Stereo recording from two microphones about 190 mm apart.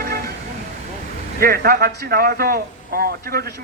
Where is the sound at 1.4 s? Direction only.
50° right (ahead or behind).